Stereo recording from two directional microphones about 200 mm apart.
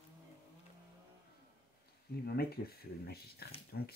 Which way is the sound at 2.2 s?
50° left (ahead or behind).